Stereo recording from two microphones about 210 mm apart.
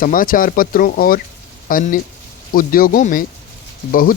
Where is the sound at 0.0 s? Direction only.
40° left (ahead or behind).